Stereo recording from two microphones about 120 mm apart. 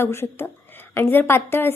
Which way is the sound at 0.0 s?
20° left (ahead or behind).